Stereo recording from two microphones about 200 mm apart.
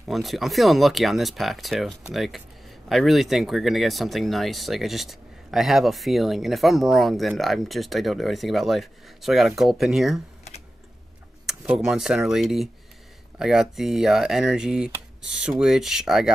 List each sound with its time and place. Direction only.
0.0 s speech: centre (ahead or behind)
11.4 s speech: 5° right (ahead or behind)